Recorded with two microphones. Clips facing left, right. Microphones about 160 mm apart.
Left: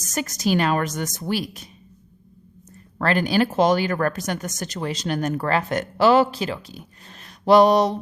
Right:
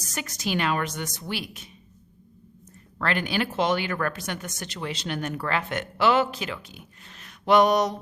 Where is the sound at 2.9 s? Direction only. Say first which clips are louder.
Left 6 dB; 40° left (ahead or behind).